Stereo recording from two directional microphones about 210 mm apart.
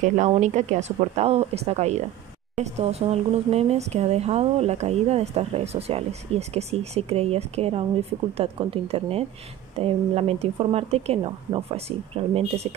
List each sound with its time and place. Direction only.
0.0 s speech: 35° right (ahead or behind)